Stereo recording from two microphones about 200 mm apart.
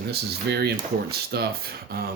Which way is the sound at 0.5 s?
55° right (ahead or behind).